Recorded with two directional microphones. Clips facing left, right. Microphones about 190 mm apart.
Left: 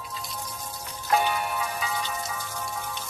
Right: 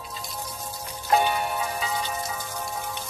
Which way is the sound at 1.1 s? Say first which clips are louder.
Right 2 dB; 25° right (ahead or behind).